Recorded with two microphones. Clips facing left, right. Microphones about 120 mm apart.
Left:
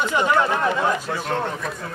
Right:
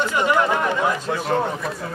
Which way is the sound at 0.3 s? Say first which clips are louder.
Right 1 dB; 10° right (ahead or behind).